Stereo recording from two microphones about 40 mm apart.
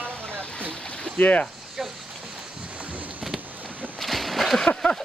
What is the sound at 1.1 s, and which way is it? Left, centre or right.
Speech, left.